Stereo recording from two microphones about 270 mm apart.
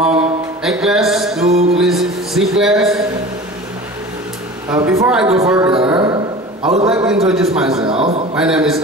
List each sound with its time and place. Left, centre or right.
0.0 s music: centre
1.8 s speech: centre
4.6 s a woman's voice: centre
6.9 s a man's voice: centre
7.7 s a man's voice: right
8.4 s a man's voice: centre